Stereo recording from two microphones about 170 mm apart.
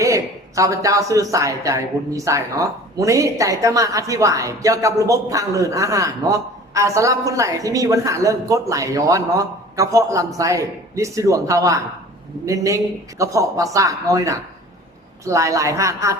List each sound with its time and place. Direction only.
0.0 s a woman's voice: 20° right (ahead or behind)